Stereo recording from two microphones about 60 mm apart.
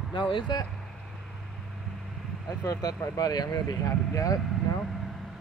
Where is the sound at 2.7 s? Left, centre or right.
Left.